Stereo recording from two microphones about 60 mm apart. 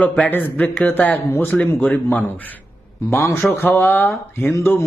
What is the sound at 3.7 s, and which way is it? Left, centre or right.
A man's voice, left.